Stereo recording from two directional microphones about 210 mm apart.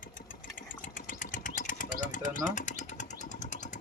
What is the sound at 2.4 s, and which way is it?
Vehicle, 35° left (ahead or behind).